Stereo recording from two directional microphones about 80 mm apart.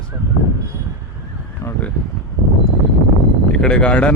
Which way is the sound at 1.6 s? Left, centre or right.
Left.